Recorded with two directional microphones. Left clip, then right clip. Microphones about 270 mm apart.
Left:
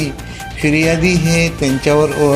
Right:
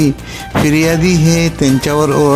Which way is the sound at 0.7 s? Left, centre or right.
Right.